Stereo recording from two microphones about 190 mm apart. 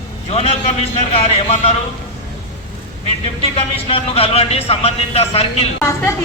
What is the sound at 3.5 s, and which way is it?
Speech, 30° left (ahead or behind).